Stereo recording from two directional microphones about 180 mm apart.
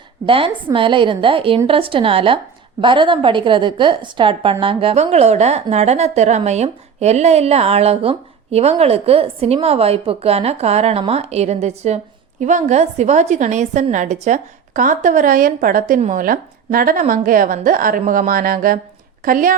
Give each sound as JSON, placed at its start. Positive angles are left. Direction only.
{"t": 0.3, "sound": "a woman's voice", "side_deg": -30}